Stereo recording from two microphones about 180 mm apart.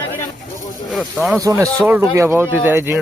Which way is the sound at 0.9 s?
Centre (ahead or behind).